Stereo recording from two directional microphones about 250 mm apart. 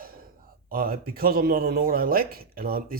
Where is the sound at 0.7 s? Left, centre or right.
Right.